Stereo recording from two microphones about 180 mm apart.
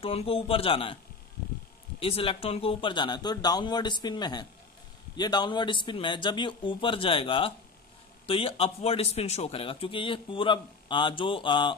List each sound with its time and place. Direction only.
0.0 s speech: 30° left (ahead or behind)
2.0 s speech: 30° left (ahead or behind)